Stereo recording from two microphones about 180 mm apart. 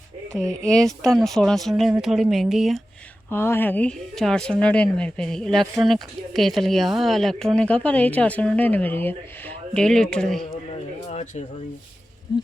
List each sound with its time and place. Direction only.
0.3 s speech: 5° left (ahead or behind)
3.2 s speech: 15° left (ahead or behind)
11.1 s a sound: 40° left (ahead or behind)